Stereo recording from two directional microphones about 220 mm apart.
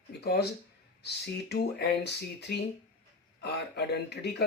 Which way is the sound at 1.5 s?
50° left (ahead or behind).